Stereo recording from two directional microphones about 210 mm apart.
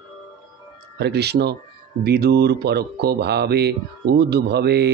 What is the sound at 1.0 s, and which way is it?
Speech, 50° right (ahead or behind).